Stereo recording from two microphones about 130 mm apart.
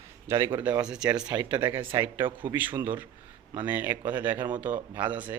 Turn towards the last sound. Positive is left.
turn(degrees=-15)  # may be behind; listen again after turning